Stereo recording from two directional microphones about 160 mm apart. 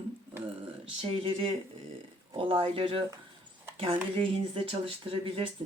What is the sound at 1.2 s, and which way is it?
Speech, 35° right (ahead or behind).